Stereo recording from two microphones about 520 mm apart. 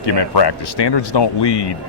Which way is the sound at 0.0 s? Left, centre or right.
Left.